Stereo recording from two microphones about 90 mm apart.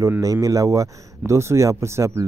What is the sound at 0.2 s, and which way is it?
Speech, 40° right (ahead or behind).